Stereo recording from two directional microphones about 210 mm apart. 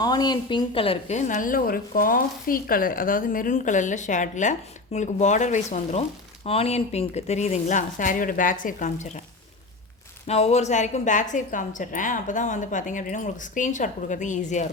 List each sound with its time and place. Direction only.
0.0 s a woman's voice: 20° left (ahead or behind); by 9.2 s 35° left (ahead or behind)
10.2 s a woman's voice: 30° left (ahead or behind)